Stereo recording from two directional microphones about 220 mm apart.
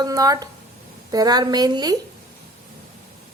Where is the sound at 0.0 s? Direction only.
15° right (ahead or behind).